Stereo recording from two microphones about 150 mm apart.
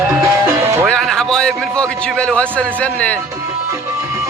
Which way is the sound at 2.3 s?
5° left (ahead or behind).